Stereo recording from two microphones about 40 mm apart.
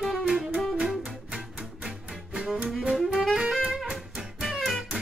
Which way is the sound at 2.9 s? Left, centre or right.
Centre.